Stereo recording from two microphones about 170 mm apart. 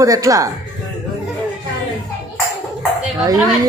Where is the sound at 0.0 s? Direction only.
20° right (ahead or behind).